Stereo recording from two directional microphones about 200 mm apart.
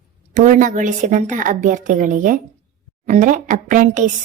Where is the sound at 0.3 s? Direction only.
40° right (ahead or behind).